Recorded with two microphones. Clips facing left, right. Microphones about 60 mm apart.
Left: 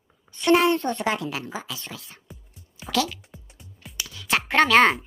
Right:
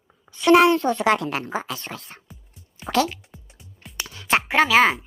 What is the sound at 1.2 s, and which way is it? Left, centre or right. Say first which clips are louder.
Speech: right 5 dB; right.